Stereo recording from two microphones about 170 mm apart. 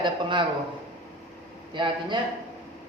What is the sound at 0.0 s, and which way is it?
Speech, 30° right (ahead or behind).